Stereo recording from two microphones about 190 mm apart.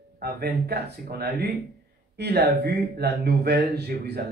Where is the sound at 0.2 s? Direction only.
55° right (ahead or behind).